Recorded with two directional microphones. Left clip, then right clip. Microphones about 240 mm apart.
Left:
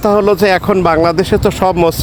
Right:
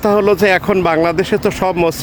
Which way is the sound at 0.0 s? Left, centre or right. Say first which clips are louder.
Left 2 dB; centre.